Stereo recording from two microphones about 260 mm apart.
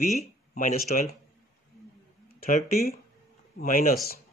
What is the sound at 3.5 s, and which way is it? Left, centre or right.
Speech, left.